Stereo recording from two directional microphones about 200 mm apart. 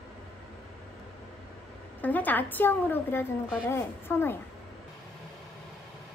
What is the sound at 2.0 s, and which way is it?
A woman's voice, 10° left (ahead or behind).